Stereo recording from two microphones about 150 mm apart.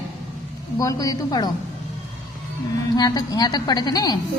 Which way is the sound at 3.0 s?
25° left (ahead or behind).